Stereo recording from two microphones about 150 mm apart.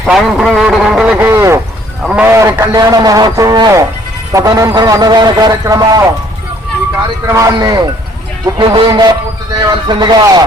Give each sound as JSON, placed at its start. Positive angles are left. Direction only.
{"t": 0.0, "sound": "a man's voice", "side_deg": 0}
{"t": 7.3, "sound": "a man's voice", "side_deg": -20}